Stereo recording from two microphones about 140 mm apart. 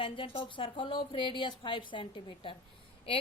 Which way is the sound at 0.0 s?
35° left (ahead or behind).